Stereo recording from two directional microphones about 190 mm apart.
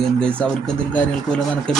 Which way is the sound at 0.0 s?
5° left (ahead or behind).